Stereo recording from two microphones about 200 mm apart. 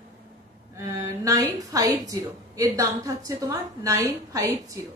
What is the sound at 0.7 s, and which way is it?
Speech, 15° right (ahead or behind).